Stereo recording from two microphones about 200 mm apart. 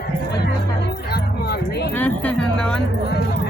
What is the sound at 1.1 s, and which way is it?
Speech, 50° left (ahead or behind).